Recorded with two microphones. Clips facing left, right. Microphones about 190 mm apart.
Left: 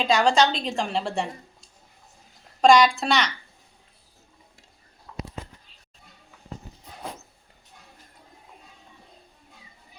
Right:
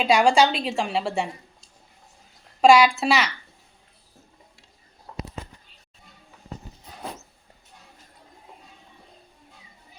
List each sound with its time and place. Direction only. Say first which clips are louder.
0.0 s a woman's voice: right 2 dB; 10° right (ahead or behind)
2.6 s a woman's voice: right 1 dB; 5° right (ahead or behind)
5.1 s a sound: right 1 dB; 40° right (ahead or behind)